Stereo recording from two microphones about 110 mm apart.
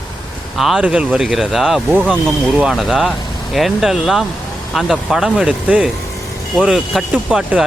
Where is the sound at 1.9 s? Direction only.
15° right (ahead or behind).